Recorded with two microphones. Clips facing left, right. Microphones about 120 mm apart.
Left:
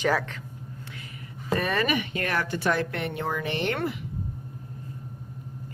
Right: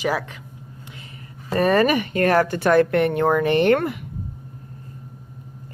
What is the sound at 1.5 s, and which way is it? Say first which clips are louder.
Speech: right 8 dB; 40° right (ahead or behind).